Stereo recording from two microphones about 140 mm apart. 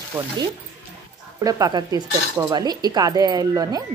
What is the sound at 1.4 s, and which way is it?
Speech, 25° right (ahead or behind).